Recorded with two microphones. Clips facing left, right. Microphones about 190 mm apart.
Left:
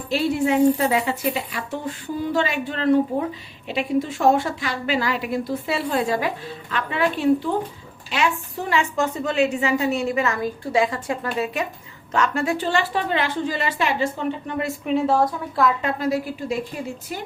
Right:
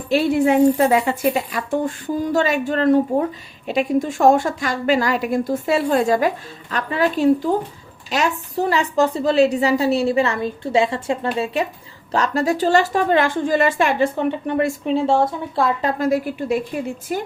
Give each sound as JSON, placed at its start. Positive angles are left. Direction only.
{"t": 0.1, "sound": "a woman's voice", "side_deg": -55}
{"t": 14.8, "sound": "a woman's voice", "side_deg": -30}